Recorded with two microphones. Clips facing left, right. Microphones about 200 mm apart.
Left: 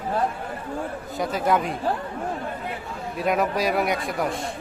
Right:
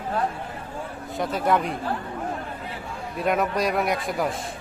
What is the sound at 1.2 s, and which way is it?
Speech, centre (ahead or behind).